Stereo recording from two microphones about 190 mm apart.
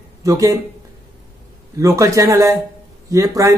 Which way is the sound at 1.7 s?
15° right (ahead or behind).